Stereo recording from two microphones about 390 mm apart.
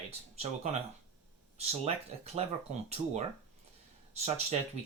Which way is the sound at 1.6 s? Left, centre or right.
Centre.